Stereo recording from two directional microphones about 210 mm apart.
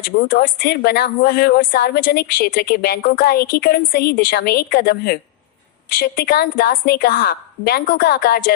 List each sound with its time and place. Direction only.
0.2 s a woman's voice: 45° left (ahead or behind)